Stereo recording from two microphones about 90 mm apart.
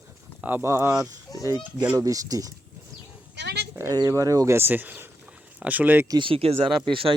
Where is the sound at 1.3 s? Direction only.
40° left (ahead or behind).